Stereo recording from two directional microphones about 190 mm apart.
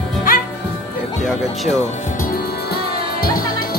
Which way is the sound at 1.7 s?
35° left (ahead or behind).